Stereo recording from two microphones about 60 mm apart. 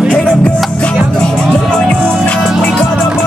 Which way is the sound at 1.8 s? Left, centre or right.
Centre.